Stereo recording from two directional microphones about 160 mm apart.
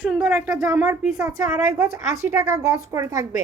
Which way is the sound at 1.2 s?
20° right (ahead or behind).